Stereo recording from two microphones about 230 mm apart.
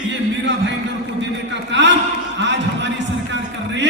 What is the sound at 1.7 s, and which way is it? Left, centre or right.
Speech, right.